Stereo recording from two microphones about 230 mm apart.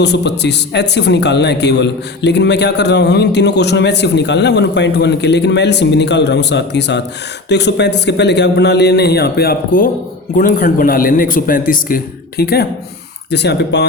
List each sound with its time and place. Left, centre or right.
0.0 s a man's voice: left